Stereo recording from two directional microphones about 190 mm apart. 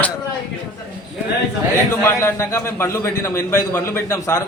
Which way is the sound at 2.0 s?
15° left (ahead or behind).